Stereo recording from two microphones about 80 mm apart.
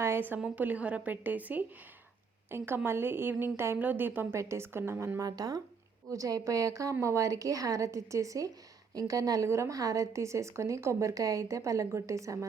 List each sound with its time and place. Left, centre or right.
0.0 s a woman's voice: right
0.3 s a woman's voice: centre; by 5.2 s right
5.2 s a woman's voice: right